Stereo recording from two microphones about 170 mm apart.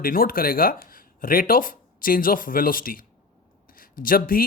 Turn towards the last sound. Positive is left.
turn(degrees=55)  # may be behind; listen again after turning